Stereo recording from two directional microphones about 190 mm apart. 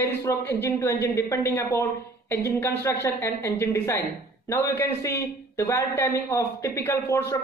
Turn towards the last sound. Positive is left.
turn(degrees=15)  # may be behind; listen again after turning